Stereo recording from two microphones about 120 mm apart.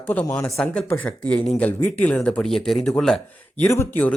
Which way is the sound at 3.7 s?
20° left (ahead or behind).